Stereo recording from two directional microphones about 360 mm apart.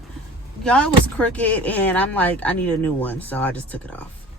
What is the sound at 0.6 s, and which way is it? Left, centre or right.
Speech, centre.